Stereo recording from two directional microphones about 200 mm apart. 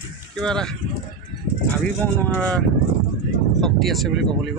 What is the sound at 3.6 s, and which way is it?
Speech, centre (ahead or behind).